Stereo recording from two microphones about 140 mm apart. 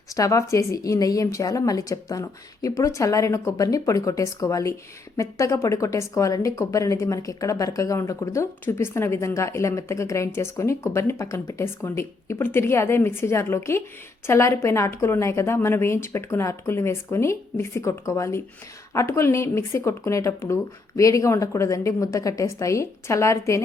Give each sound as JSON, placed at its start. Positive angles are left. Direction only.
{"t": 0.1, "sound": "speech", "side_deg": 25}